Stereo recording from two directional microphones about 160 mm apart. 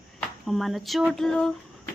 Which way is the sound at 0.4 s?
Centre (ahead or behind).